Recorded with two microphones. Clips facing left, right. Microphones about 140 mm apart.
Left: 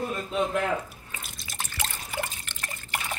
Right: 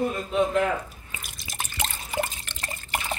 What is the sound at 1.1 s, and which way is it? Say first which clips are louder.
Drip: right 1 dB; 20° right (ahead or behind).